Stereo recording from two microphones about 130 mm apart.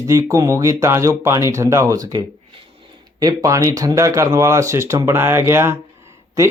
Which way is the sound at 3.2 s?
25° right (ahead or behind).